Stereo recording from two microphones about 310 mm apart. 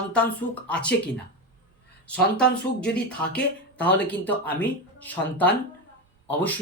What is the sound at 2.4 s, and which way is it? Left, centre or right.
Speech, left.